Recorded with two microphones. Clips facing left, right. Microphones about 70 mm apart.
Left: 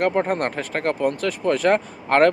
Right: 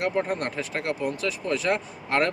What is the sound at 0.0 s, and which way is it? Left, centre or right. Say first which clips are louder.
Speech: left 5 dB; left.